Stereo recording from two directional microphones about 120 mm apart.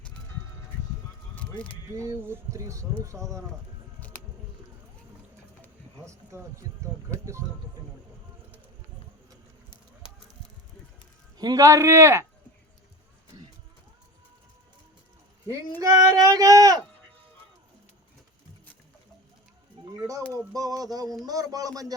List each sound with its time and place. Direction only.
1.4 s speech: 10° left (ahead or behind)
2.0 s speech: 20° right (ahead or behind)
6.1 s speech: 25° right (ahead or behind)
11.3 s speech: 30° right (ahead or behind)
15.8 s speech: 25° right (ahead or behind)
20.0 s speech: 30° right (ahead or behind)